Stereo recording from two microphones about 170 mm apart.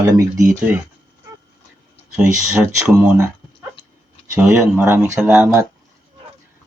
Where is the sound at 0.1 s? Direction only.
20° right (ahead or behind).